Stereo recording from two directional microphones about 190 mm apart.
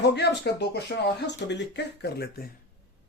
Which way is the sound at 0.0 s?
65° left (ahead or behind).